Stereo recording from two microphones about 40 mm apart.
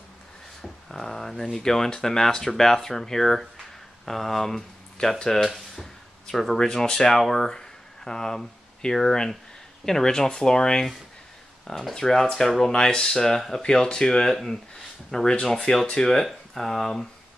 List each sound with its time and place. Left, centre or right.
0.6 s speech: centre
11.9 s speech: centre